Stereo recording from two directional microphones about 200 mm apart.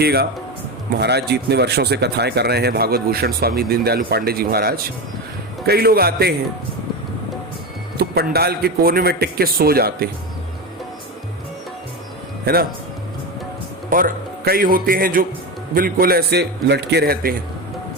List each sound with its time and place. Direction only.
0.0 s speech: 55° right (ahead or behind)
7.9 s speech: 50° right (ahead or behind)
12.5 s speech: 50° right (ahead or behind)
13.9 s a man's voice: 45° right (ahead or behind)